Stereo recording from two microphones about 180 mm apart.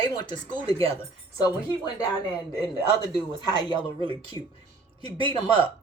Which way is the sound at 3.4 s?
25° left (ahead or behind).